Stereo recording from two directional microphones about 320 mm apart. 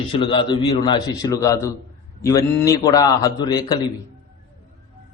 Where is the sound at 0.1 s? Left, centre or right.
Centre.